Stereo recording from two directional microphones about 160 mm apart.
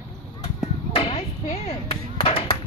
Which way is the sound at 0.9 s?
35° left (ahead or behind).